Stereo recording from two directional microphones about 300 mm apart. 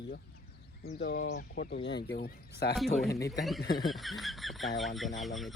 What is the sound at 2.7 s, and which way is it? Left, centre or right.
Speech, centre.